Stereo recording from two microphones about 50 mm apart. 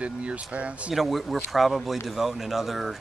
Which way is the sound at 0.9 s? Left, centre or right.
Centre.